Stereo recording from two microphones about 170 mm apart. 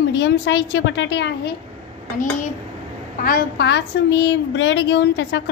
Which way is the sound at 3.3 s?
75° left (ahead or behind).